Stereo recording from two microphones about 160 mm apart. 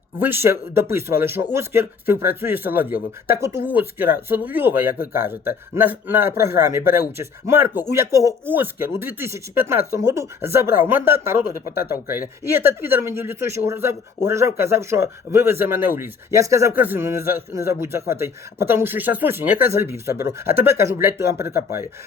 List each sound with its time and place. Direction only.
0.2 s speech: 15° right (ahead or behind)